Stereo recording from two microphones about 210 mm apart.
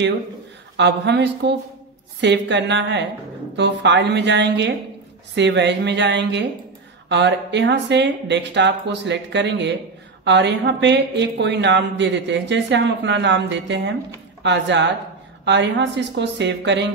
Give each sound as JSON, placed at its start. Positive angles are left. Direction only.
{"t": 0.7, "sound": "speech", "side_deg": -55}